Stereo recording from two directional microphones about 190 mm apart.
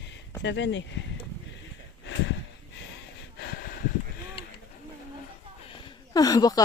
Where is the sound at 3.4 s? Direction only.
55° left (ahead or behind).